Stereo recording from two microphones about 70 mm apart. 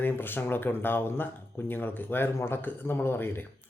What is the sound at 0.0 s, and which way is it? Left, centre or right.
Speech, left.